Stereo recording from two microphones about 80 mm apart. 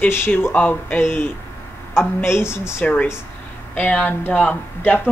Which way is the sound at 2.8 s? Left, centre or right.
Left.